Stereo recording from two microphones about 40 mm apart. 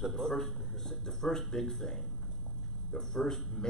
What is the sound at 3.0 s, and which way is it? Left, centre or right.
Speech, centre.